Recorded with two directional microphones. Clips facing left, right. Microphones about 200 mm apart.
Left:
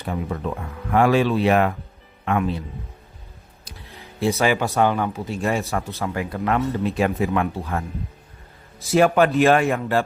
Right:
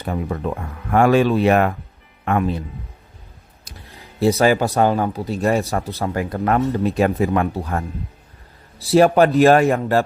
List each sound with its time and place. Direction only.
0.0 s speech: 45° right (ahead or behind)
4.2 s a man's voice: 35° right (ahead or behind)